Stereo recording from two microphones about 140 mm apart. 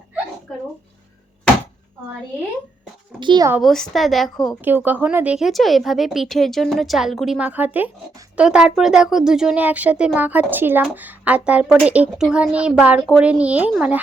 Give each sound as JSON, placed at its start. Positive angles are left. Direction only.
{"t": 3.2, "sound": "speech", "side_deg": -35}
{"t": 3.6, "sound": "speech", "side_deg": 0}
{"t": 4.6, "sound": "speech", "side_deg": -15}